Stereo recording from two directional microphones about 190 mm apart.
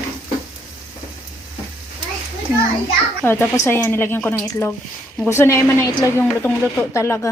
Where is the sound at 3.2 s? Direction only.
10° left (ahead or behind).